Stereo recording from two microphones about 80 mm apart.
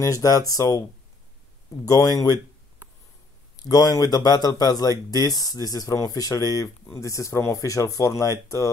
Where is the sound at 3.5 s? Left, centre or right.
Left.